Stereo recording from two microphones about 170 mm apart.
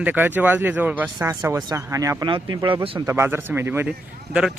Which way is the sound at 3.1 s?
15° right (ahead or behind).